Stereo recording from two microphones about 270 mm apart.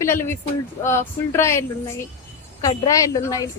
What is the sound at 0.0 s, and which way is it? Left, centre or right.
A woman's voice, centre.